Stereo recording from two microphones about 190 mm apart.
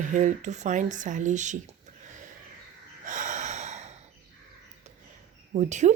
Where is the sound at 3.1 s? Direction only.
40° right (ahead or behind).